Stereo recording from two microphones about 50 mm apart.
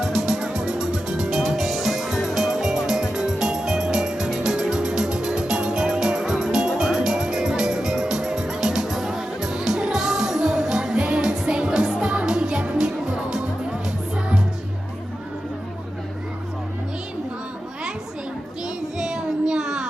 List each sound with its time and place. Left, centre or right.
0.0 s music: centre
18.9 s child singing: centre